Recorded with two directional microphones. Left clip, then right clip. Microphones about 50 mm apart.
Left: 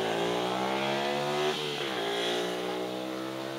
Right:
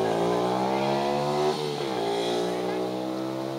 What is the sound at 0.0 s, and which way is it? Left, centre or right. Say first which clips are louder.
Vehicle: right 5 dB; left.